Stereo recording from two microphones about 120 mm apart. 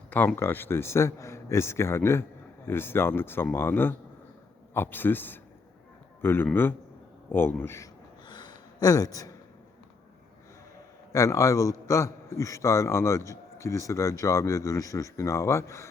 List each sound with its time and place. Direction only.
0.3 s a man's voice: 20° left (ahead or behind)
8.3 s a sound: 35° left (ahead or behind)
11.1 s a man's voice: 25° left (ahead or behind)